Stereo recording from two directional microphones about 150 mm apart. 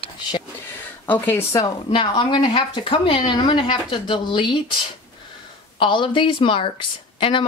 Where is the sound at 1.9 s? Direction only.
35° left (ahead or behind).